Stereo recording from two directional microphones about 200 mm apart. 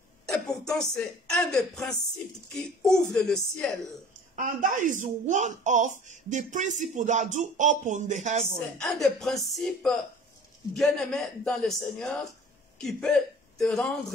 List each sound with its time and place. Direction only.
0.7 s a man's voice: 5° left (ahead or behind)
4.4 s speech: 40° right (ahead or behind)
8.7 s a man's voice: centre (ahead or behind)